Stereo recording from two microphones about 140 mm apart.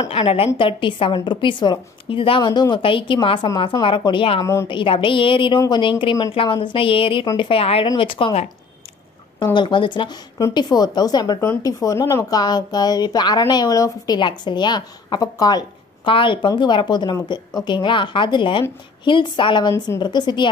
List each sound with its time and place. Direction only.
0.0 s a woman's voice: 45° left (ahead or behind)
4.4 s speech: 20° left (ahead or behind)
4.6 s a woman's voice: 40° left (ahead or behind)